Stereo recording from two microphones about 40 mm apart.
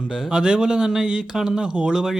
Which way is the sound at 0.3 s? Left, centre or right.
Right.